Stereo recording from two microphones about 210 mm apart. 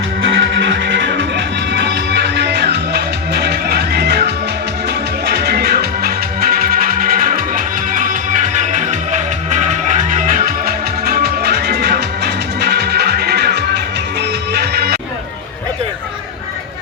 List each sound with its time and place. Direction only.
0.2 s music: 60° right (ahead or behind)